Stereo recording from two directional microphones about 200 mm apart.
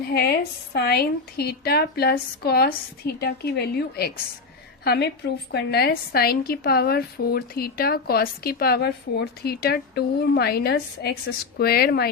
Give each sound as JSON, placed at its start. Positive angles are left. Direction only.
{"t": 0.0, "sound": "a woman's voice", "side_deg": 50}